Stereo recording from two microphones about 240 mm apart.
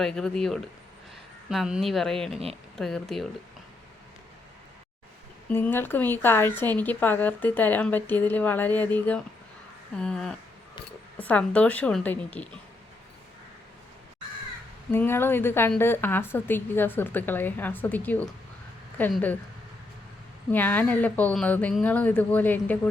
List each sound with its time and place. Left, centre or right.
0.0 s a woman's voice: centre
5.5 s a woman's voice: centre
14.8 s speech: centre
20.5 s speech: centre